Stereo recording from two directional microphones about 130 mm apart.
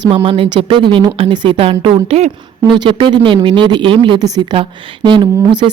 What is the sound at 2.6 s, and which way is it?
A woman's voice, 40° right (ahead or behind).